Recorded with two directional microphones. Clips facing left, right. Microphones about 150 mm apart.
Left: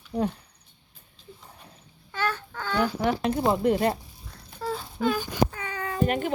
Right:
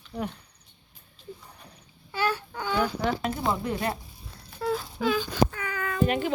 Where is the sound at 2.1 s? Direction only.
10° right (ahead or behind).